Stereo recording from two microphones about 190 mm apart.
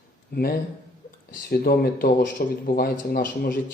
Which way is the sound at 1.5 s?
50° left (ahead or behind).